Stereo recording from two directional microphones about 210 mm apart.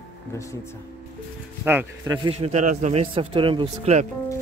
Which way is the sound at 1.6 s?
10° right (ahead or behind).